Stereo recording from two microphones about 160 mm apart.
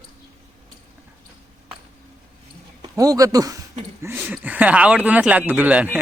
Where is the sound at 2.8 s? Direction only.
25° right (ahead or behind).